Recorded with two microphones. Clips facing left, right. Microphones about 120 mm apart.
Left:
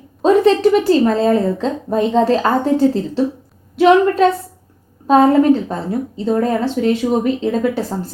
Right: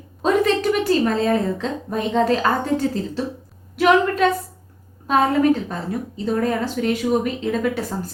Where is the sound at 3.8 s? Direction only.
30° left (ahead or behind).